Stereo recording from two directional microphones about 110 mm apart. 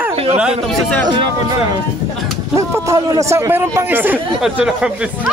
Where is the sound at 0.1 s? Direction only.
60° right (ahead or behind).